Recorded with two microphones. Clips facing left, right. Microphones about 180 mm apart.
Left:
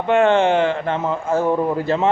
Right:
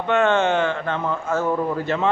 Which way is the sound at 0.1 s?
30° left (ahead or behind).